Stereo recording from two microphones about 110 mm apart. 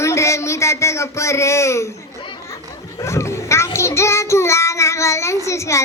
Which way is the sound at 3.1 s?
25° left (ahead or behind).